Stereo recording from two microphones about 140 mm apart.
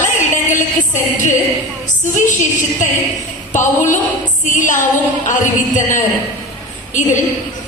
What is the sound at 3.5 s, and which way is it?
Music, 65° left (ahead or behind).